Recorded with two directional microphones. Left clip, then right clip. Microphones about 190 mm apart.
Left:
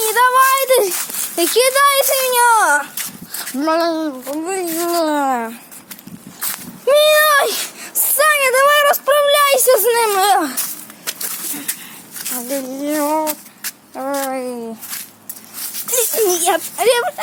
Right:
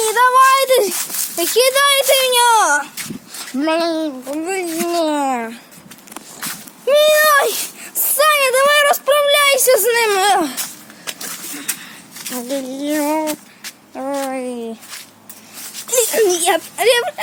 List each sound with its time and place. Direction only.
0.1 s a sound: centre (ahead or behind)
1.7 s speech: 5° left (ahead or behind)
6.8 s a child's voice: 25° left (ahead or behind)
7.9 s a sound: 20° left (ahead or behind); by 10.1 s centre (ahead or behind)
10.2 s speech: 10° left (ahead or behind)
12.5 s speech: centre (ahead or behind)
13.2 s a sound: 65° left (ahead or behind)
14.3 s speech: centre (ahead or behind)
15.9 s speech: 10° right (ahead or behind)